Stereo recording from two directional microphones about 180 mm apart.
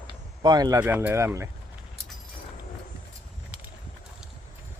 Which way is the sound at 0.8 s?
10° right (ahead or behind).